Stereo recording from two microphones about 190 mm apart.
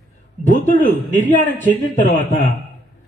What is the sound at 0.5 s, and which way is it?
Speech, 40° left (ahead or behind).